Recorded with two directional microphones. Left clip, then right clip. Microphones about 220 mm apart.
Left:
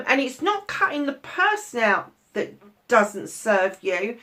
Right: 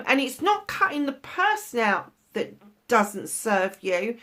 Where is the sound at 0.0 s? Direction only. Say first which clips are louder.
Left 1 dB; 45° right (ahead or behind).